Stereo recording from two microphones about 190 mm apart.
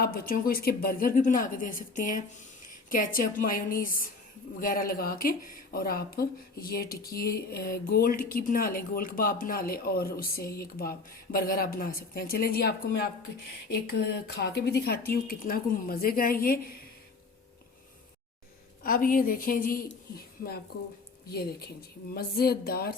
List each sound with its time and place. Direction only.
0.0 s speech: 50° left (ahead or behind)
18.8 s a woman's voice: 50° left (ahead or behind)